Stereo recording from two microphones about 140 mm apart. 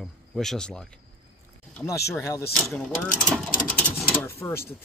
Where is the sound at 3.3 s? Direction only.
5° left (ahead or behind).